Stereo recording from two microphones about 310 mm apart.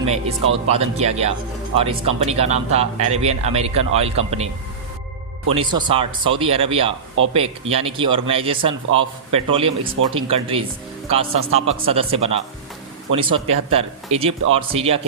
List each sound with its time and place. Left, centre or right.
0.0 s speech: centre
5.5 s speech: centre